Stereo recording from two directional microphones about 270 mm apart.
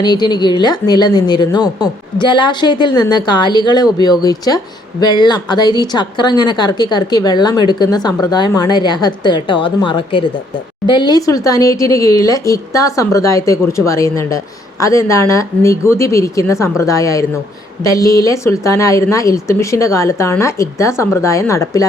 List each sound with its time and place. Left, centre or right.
0.0 s a woman's voice: centre